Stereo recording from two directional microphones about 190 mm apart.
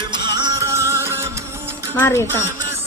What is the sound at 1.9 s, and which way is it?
Speech, 10° left (ahead or behind).